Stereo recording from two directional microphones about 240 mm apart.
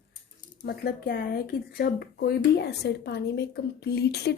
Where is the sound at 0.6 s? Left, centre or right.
Left.